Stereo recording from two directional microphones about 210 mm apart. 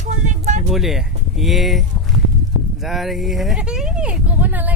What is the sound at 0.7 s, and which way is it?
Speech, centre (ahead or behind).